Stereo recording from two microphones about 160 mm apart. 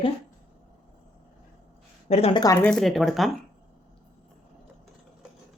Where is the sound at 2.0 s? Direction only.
40° left (ahead or behind).